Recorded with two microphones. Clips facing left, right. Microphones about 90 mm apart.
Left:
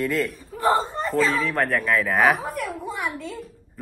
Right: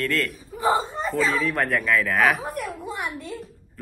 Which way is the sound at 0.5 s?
15° right (ahead or behind).